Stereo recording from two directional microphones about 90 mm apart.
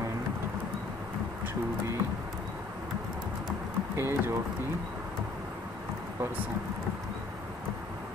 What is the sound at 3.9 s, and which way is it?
Speech, 25° right (ahead or behind).